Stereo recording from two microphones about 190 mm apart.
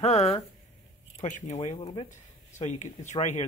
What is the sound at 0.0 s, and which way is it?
Speech, 35° left (ahead or behind).